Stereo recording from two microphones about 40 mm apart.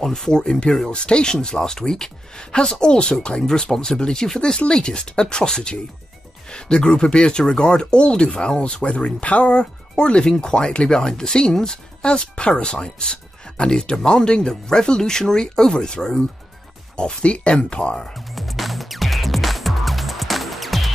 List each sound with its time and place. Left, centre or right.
0.0 s speech: centre; by 17.9 s left
18.3 s music: centre